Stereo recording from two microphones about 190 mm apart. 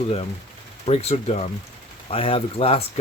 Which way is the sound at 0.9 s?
30° left (ahead or behind).